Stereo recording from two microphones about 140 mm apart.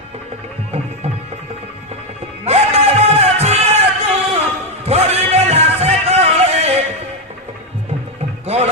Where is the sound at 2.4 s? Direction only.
50° right (ahead or behind).